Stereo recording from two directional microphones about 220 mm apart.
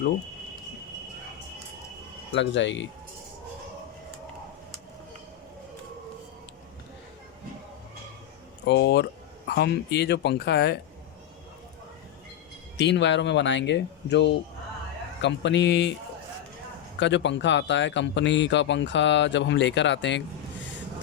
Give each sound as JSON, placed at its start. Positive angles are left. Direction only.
{"t": 2.3, "sound": "speech", "side_deg": 55}
{"t": 8.6, "sound": "speech", "side_deg": 50}
{"t": 12.7, "sound": "speech", "side_deg": 55}
{"t": 17.0, "sound": "speech", "side_deg": 55}